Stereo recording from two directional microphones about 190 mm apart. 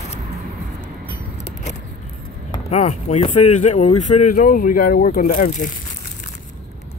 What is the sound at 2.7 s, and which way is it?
Speech, 40° left (ahead or behind).